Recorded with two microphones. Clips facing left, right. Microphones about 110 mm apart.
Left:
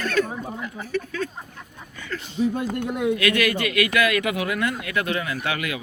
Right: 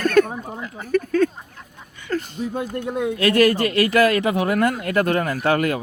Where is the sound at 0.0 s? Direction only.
50° right (ahead or behind).